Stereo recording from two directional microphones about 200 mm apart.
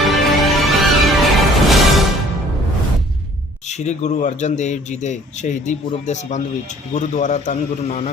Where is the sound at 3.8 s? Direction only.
35° left (ahead or behind).